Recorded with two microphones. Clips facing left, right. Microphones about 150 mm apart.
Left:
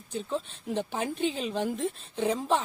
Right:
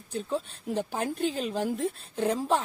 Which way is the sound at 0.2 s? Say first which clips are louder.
Right 1 dB; 10° right (ahead or behind).